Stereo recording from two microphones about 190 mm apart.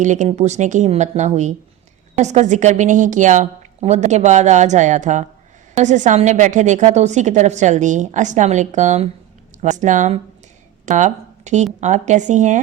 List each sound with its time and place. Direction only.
0.0 s a woman's voice: 40° right (ahead or behind)